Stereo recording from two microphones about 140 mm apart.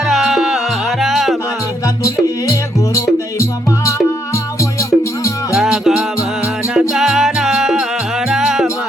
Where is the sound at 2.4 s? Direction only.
20° left (ahead or behind).